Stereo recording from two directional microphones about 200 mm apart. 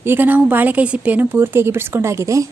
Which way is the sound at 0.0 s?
10° right (ahead or behind).